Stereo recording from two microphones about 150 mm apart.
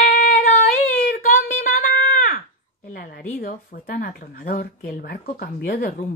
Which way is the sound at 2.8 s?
65° left (ahead or behind).